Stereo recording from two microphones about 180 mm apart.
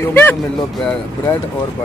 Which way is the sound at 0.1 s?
10° left (ahead or behind).